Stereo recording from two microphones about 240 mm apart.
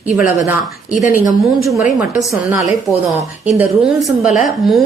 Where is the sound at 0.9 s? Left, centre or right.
Left.